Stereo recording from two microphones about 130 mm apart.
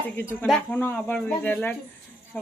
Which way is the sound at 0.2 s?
15° left (ahead or behind).